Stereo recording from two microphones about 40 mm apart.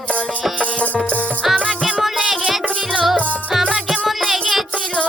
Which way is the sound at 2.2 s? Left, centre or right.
Centre.